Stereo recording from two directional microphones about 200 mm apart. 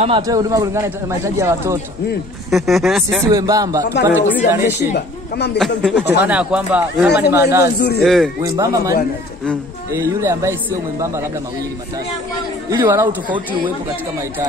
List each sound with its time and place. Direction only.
0.0 s speech: 20° right (ahead or behind)
2.5 s speech: centre (ahead or behind)
3.2 s speech: 15° right (ahead or behind)
4.9 s a woman's voice: 55° left (ahead or behind)
5.8 s speech: 5° left (ahead or behind)
6.2 s speech: 5° right (ahead or behind)
8.0 s speech: centre (ahead or behind)
8.4 s speech: 15° right (ahead or behind)
12.6 s speech: 15° right (ahead or behind)